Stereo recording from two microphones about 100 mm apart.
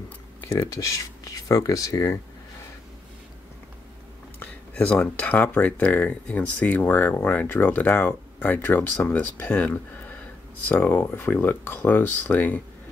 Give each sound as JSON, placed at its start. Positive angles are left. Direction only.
{"t": 0.7, "sound": "speech", "side_deg": 35}
{"t": 4.4, "sound": "speech", "side_deg": 15}